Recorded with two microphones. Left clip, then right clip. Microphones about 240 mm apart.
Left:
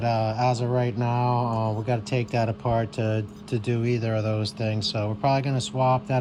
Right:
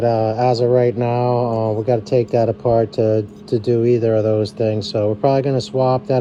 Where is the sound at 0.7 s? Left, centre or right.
Left.